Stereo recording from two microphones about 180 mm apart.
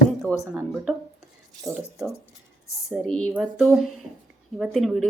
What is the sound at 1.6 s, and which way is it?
Speech, centre (ahead or behind).